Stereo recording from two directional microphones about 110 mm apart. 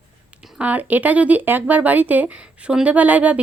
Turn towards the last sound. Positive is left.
turn(degrees=-15)  # may be behind; listen again after turning